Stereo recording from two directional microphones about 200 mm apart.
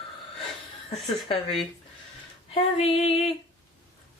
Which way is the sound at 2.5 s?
30° left (ahead or behind).